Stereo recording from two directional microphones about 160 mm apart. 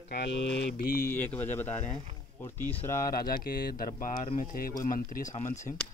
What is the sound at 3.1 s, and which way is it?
Speech, 65° left (ahead or behind).